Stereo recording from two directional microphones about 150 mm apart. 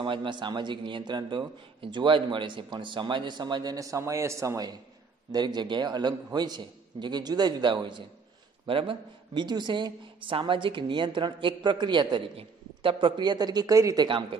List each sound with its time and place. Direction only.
0.0 s a man's voice: 35° right (ahead or behind)
14.0 s speech: 35° right (ahead or behind)